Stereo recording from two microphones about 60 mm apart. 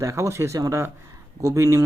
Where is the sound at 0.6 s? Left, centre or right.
Right.